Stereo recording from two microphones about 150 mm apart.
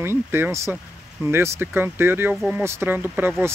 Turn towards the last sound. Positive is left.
turn(degrees=-10)  # may be behind; listen again after turning